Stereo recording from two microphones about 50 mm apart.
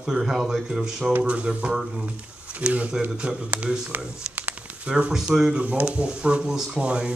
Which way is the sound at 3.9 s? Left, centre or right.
Right.